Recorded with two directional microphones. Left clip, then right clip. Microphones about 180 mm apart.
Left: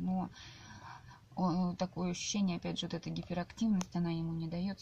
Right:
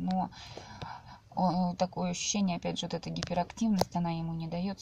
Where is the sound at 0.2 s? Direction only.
10° left (ahead or behind).